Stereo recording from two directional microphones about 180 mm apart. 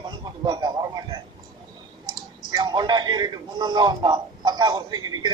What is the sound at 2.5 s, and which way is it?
A man's voice, 25° right (ahead or behind).